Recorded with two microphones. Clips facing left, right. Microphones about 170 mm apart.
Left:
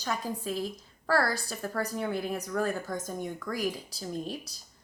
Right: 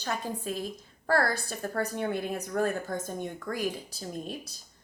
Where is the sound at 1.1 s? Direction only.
50° right (ahead or behind).